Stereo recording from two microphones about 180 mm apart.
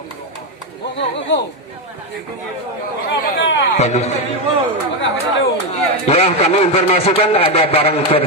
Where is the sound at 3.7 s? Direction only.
40° left (ahead or behind).